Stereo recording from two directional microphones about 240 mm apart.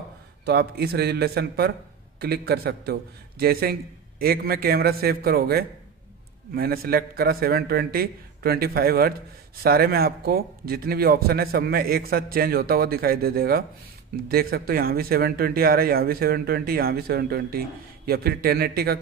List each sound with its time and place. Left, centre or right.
0.5 s speech: right